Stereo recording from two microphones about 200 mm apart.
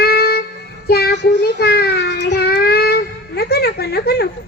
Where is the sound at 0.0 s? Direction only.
50° left (ahead or behind).